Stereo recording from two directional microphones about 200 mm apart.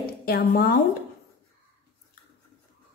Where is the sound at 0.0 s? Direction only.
50° left (ahead or behind).